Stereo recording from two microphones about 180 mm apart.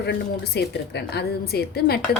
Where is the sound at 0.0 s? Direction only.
70° left (ahead or behind).